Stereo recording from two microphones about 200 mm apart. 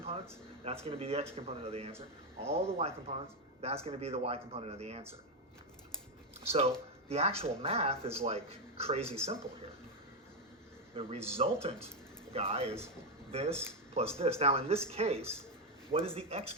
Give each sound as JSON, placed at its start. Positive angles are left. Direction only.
{"t": 0.6, "sound": "speech", "side_deg": -30}
{"t": 6.5, "sound": "speech", "side_deg": -30}
{"t": 10.9, "sound": "speech", "side_deg": -30}